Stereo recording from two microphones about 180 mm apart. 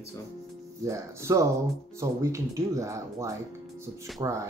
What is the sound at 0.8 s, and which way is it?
Speech, 15° right (ahead or behind).